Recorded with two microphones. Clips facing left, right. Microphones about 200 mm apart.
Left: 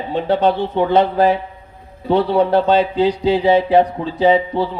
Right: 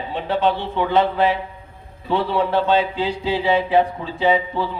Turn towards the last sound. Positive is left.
turn(degrees=35)  # may be behind; listen again after turning